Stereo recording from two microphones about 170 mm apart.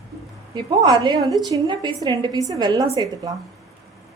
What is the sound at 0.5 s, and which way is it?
A woman's voice, 25° right (ahead or behind).